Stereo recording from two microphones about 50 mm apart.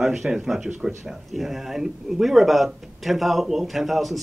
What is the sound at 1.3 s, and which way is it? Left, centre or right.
Speech, centre.